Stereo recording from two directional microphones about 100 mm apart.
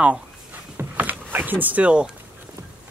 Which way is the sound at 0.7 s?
20° right (ahead or behind).